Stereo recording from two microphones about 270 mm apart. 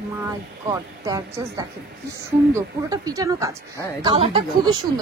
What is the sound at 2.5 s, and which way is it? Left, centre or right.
Speech, centre.